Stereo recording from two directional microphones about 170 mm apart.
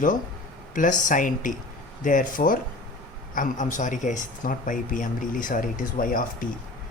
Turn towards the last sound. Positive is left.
turn(degrees=55)  # may be behind; listen again after turning